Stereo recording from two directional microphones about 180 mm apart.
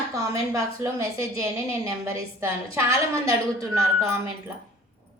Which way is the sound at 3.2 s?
20° right (ahead or behind).